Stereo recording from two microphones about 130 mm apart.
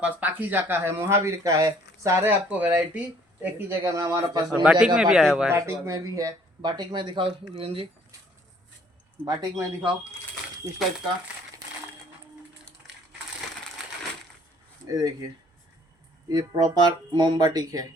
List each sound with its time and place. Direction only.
0.0 s speech: 10° right (ahead or behind)
4.6 s a man's voice: 5° right (ahead or behind)
5.5 s speech: 20° right (ahead or behind); by 7.9 s 45° right (ahead or behind)
9.2 s speech: 30° right (ahead or behind)
14.8 s speech: 25° right (ahead or behind)
16.3 s speech: 30° right (ahead or behind)